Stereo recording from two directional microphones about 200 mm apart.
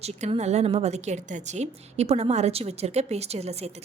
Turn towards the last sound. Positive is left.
turn(degrees=-30)  # may be behind; listen again after turning